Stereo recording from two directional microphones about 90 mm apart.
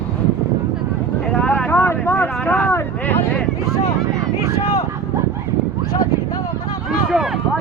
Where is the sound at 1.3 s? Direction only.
15° left (ahead or behind); by 2.8 s 35° left (ahead or behind).